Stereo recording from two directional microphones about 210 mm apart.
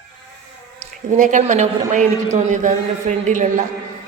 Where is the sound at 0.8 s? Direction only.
35° right (ahead or behind).